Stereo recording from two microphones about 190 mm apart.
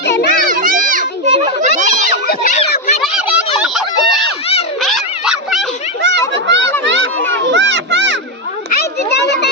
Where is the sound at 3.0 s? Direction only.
5° right (ahead or behind).